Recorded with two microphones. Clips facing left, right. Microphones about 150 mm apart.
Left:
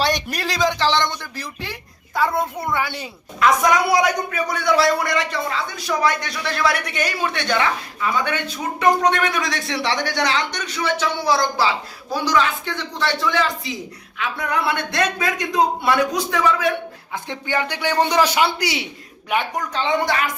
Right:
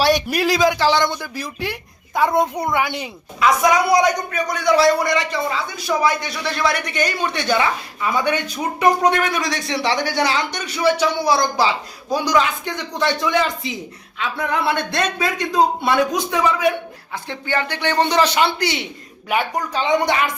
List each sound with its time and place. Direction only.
0.0 s speech: 10° right (ahead or behind)
3.4 s a man's voice: centre (ahead or behind); by 13.1 s 15° right (ahead or behind)
14.2 s a man's voice: 30° right (ahead or behind)
17.2 s speech: 10° left (ahead or behind)
19.3 s a man's voice: 5° right (ahead or behind)